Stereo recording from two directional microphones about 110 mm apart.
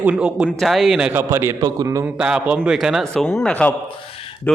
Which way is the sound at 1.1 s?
20° right (ahead or behind).